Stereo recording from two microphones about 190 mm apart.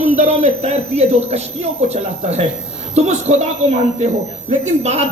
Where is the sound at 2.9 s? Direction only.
35° right (ahead or behind).